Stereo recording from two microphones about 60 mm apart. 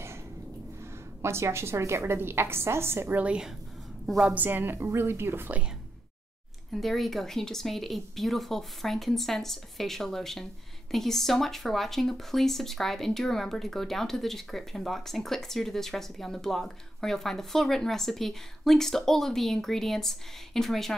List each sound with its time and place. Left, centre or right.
1.2 s a woman's voice: right
3.2 s a woman's voice: centre
4.0 s a woman's voice: centre
4.3 s a woman's voice: right
6.7 s speech: centre